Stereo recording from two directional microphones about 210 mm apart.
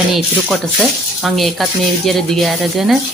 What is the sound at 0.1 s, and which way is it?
Speech, centre (ahead or behind).